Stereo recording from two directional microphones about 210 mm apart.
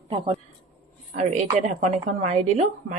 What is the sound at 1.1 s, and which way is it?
Speech, 35° right (ahead or behind).